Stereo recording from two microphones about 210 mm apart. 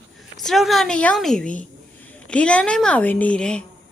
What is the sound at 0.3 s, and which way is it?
A woman's voice, centre (ahead or behind).